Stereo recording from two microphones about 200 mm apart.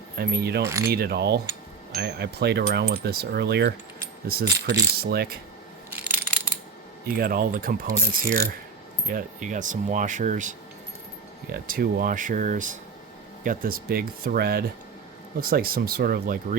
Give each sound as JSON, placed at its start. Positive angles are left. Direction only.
{"t": 0.2, "sound": "speech", "side_deg": -50}
{"t": 0.6, "sound": "speech", "side_deg": -15}
{"t": 0.9, "sound": "speech", "side_deg": -55}
{"t": 2.0, "sound": "a sound", "side_deg": -55}
{"t": 4.3, "sound": "speech", "side_deg": -55}
{"t": 7.2, "sound": "speech", "side_deg": -45}
{"t": 11.5, "sound": "speech", "side_deg": -45}